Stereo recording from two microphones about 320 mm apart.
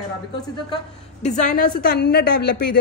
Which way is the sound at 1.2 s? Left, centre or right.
Left.